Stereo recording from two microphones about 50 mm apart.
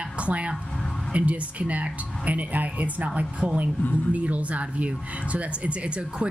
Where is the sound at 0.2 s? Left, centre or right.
Right.